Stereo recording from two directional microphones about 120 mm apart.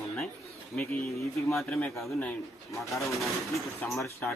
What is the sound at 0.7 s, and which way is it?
Speech, centre (ahead or behind).